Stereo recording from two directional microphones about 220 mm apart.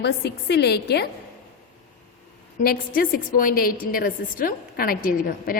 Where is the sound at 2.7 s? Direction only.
45° left (ahead or behind).